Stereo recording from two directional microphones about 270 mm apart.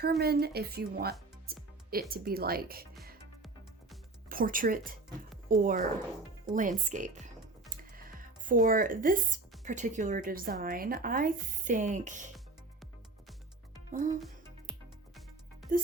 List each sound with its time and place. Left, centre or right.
0.2 s speech: right
4.3 s speech: right
13.9 s speech: right